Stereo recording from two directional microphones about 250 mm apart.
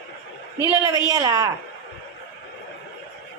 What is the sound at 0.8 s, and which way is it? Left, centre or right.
Speech, centre.